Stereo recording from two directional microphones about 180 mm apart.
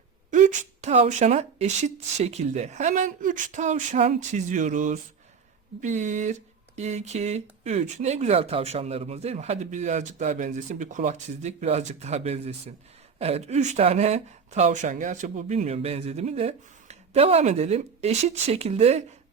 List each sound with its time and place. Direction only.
0.3 s speech: 40° right (ahead or behind)